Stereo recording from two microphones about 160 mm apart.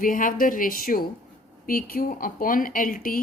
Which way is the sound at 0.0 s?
55° left (ahead or behind).